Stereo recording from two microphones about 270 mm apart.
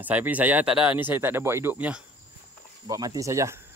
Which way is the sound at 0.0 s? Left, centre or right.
Centre.